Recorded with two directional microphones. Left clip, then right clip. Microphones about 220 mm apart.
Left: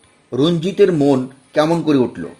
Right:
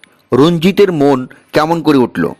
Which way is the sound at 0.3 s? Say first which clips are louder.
Right 7 dB; 45° right (ahead or behind).